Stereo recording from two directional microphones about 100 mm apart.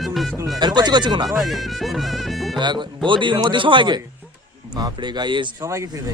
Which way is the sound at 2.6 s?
50° right (ahead or behind).